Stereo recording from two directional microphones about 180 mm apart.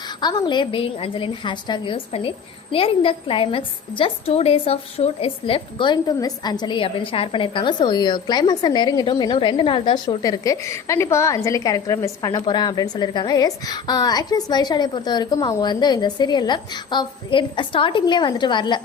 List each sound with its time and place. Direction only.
0.2 s a woman's voice: 25° left (ahead or behind)